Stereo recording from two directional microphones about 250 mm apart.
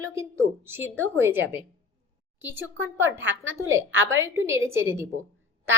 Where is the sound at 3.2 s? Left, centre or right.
Right.